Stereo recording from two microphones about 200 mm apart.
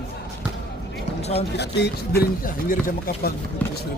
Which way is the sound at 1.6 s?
55° left (ahead or behind).